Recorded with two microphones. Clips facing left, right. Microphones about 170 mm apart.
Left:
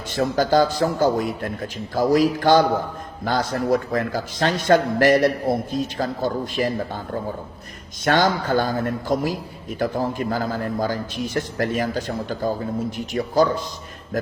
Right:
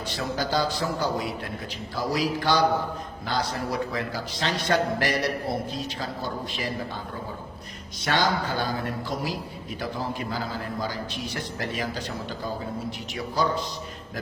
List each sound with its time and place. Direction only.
0.1 s a man's voice: 50° left (ahead or behind)
8.0 s a man's voice: 50° left (ahead or behind)